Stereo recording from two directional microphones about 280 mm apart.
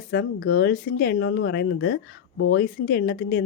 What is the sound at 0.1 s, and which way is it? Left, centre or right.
A woman's voice, left.